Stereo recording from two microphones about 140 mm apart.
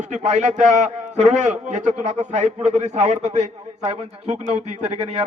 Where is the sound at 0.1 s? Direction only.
55° right (ahead or behind).